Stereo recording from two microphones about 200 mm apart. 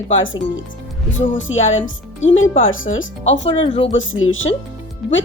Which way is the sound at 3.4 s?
30° left (ahead or behind).